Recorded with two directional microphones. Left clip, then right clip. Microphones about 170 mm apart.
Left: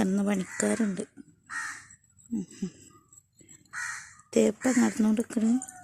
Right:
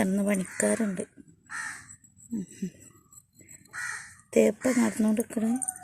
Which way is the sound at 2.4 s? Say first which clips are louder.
Left 1 dB; 25° left (ahead or behind).